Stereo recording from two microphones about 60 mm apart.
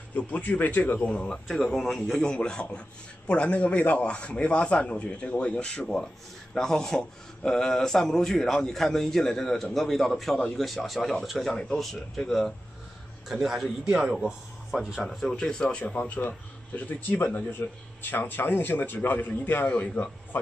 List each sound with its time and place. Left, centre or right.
0.1 s speech: left
1.0 s a man's voice: centre
15.0 s a man's voice: centre
15.8 s speech: left